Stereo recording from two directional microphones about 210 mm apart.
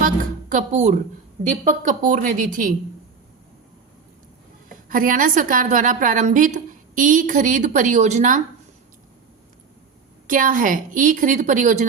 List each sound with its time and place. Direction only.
0.0 s music: 35° right (ahead or behind)
1.6 s a woman's voice: 40° right (ahead or behind)
4.9 s a woman's voice: 40° right (ahead or behind)
10.2 s a woman's voice: 40° right (ahead or behind)